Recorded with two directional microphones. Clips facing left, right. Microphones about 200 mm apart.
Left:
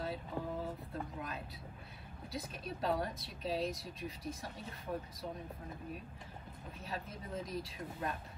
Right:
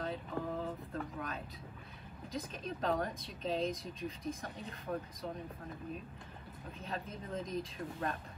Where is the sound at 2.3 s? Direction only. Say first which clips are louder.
Right 2 dB; 5° left (ahead or behind).